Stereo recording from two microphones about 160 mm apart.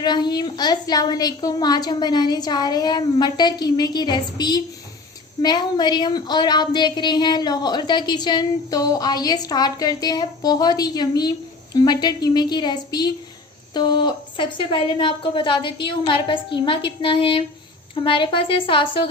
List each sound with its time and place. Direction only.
0.0 s a woman's voice: 25° left (ahead or behind)